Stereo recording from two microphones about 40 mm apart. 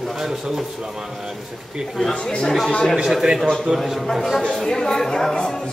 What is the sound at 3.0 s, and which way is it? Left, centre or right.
Speech, centre.